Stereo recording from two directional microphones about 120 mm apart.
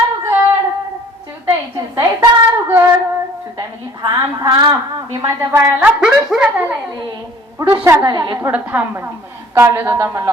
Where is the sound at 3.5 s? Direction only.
35° right (ahead or behind).